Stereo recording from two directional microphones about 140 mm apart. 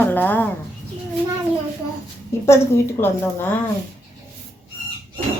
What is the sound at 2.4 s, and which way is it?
A woman's voice, 20° left (ahead or behind).